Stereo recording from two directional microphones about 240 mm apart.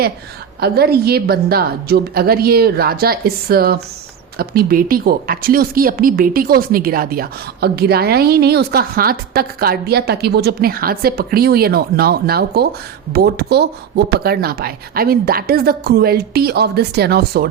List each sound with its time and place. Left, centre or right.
0.6 s speech: right